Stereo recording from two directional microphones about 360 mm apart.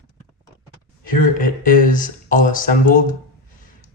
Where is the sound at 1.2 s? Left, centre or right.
Left.